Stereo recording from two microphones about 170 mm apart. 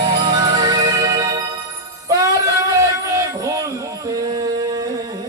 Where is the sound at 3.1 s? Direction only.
20° right (ahead or behind).